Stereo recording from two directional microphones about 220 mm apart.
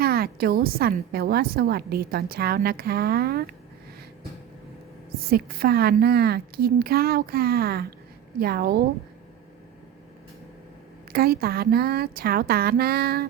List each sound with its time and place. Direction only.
0.0 s a woman's voice: 45° right (ahead or behind)
5.2 s a woman's voice: 45° right (ahead or behind)
11.1 s a woman's voice: 45° right (ahead or behind)